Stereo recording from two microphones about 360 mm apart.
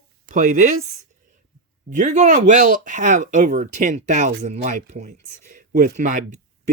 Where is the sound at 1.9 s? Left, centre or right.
Centre.